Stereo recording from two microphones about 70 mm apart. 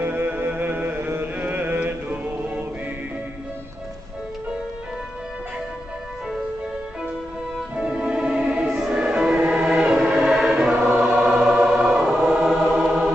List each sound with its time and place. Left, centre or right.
0.0 s music: right
7.7 s music: centre
10.0 s choir: centre